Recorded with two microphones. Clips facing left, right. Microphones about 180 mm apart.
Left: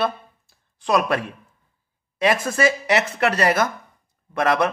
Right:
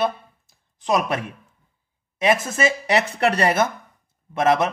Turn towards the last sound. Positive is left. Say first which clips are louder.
# right 1 dB
turn(degrees=-20)  # may be behind; listen again after turning